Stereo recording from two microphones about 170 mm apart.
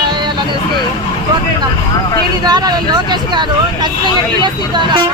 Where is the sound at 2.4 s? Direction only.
25° right (ahead or behind).